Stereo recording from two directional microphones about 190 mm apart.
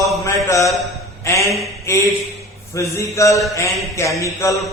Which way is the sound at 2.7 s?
15° left (ahead or behind).